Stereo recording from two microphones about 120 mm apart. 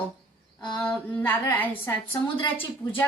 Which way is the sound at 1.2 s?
20° left (ahead or behind).